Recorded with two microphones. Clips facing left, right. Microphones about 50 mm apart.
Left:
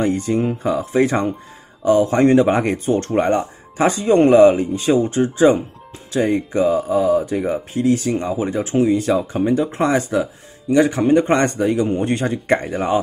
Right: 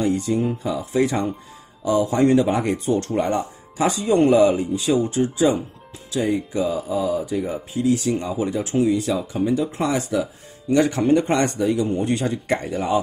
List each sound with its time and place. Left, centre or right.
0.0 s speech: left
10.7 s speech: centre
11.1 s speech: left